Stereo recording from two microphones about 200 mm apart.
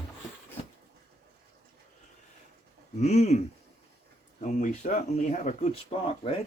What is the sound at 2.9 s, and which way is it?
Speech, 35° left (ahead or behind).